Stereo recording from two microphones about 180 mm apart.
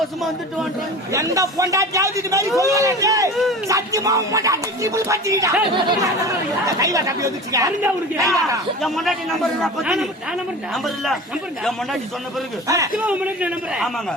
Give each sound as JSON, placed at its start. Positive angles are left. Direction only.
{"t": 1.1, "sound": "music", "side_deg": -20}
{"t": 2.6, "sound": "speech", "side_deg": -20}
{"t": 3.7, "sound": "music", "side_deg": -20}
{"t": 5.7, "sound": "speech", "side_deg": -20}
{"t": 8.8, "sound": "a man's voice", "side_deg": 0}
{"t": 12.6, "sound": "music", "side_deg": -15}